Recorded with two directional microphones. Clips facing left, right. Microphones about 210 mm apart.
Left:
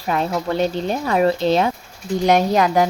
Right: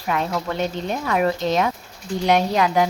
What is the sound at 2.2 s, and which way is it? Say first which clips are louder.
Speech: left 3 dB; 45° left (ahead or behind).